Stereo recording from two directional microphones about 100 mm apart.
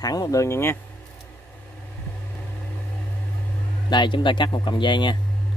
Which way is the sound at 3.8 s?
50° left (ahead or behind).